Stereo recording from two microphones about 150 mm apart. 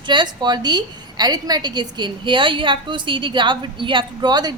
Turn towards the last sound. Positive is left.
turn(degrees=-30)  # may be behind; listen again after turning